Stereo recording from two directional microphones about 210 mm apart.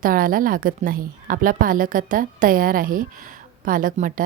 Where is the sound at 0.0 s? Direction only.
40° right (ahead or behind).